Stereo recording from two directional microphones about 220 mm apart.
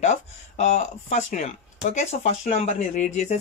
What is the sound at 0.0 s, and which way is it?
Speech, 30° left (ahead or behind).